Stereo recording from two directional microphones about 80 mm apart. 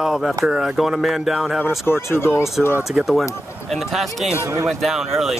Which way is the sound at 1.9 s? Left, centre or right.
Left.